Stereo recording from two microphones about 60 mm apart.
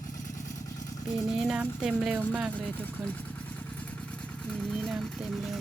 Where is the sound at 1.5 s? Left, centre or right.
Centre.